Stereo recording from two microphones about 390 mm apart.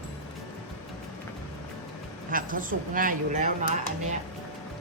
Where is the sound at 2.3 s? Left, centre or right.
Right.